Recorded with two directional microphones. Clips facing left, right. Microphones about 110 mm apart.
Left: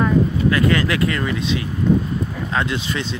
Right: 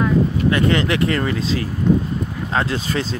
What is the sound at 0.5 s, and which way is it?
Speech, 30° right (ahead or behind).